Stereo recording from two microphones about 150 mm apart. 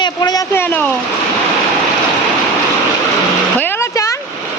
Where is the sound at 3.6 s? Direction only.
15° left (ahead or behind).